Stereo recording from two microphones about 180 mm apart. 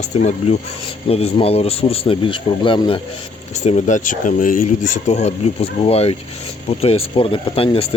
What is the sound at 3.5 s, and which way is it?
Speech, 40° left (ahead or behind).